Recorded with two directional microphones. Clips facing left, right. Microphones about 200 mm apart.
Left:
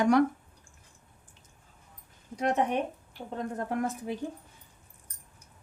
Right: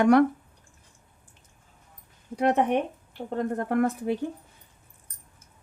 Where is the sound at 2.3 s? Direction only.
60° right (ahead or behind).